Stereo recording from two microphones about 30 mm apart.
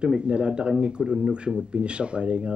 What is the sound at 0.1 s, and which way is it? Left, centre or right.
Speech, right.